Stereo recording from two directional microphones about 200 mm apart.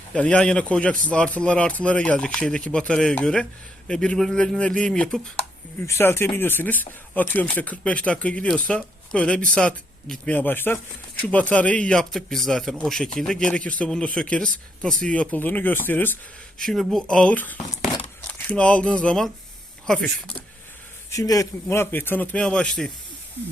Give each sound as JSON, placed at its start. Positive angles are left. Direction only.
{"t": 0.1, "sound": "speech", "side_deg": 5}
{"t": 21.1, "sound": "speech", "side_deg": 15}